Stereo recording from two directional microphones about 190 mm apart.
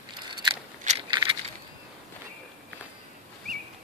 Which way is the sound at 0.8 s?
30° right (ahead or behind).